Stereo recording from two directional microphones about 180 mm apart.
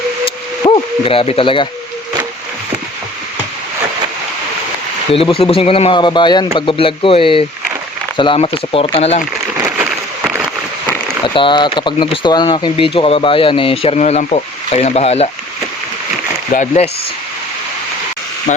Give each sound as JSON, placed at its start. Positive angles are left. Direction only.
{"t": 0.6, "sound": "speech", "side_deg": 30}
{"t": 5.1, "sound": "speech", "side_deg": 30}
{"t": 11.3, "sound": "speech", "side_deg": 25}
{"t": 16.5, "sound": "speech", "side_deg": 40}